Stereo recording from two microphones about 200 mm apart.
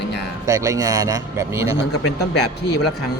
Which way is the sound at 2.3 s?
60° left (ahead or behind).